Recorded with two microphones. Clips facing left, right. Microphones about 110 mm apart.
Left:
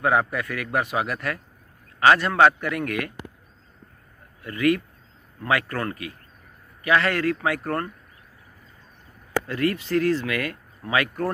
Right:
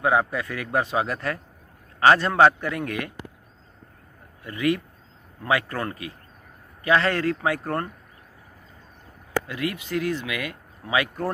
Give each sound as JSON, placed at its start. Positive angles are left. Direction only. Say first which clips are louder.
{"t": 0.0, "sound": "a man's voice", "louder": "even", "side_deg": -20}
{"t": 4.4, "sound": "a man's voice", "louder": "left 2 dB", "side_deg": -20}
{"t": 9.5, "sound": "speech", "louder": "left 5 dB", "side_deg": -15}